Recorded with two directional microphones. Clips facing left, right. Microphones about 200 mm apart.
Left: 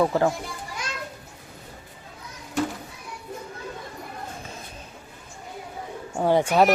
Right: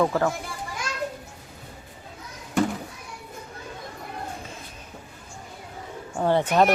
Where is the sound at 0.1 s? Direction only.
25° left (ahead or behind).